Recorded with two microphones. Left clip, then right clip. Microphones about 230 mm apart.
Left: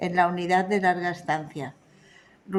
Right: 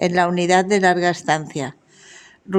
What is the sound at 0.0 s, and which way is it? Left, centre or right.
Speech, right.